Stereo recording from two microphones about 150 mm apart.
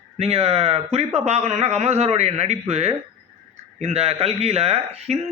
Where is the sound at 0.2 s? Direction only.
45° right (ahead or behind).